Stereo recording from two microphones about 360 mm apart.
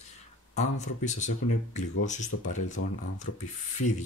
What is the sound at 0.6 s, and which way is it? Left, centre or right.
Speech, centre.